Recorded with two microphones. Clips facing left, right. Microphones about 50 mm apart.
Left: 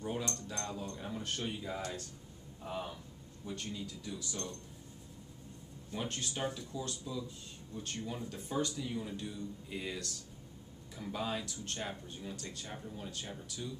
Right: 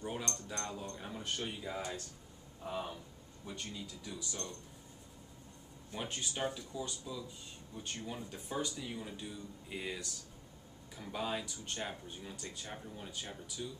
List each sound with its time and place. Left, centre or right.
0.0 s keys jangling: centre
2.6 s speech: centre
5.9 s speech: centre